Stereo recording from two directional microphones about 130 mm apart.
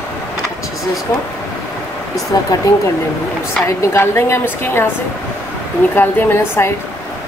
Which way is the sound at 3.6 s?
20° left (ahead or behind).